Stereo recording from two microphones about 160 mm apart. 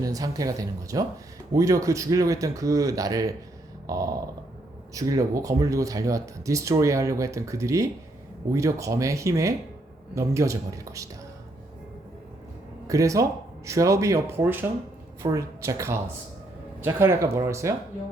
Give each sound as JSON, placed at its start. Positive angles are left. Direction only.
{"t": 0.0, "sound": "speech", "side_deg": -20}
{"t": 12.9, "sound": "speech", "side_deg": -20}